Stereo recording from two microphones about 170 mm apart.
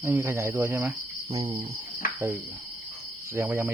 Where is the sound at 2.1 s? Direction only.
15° right (ahead or behind).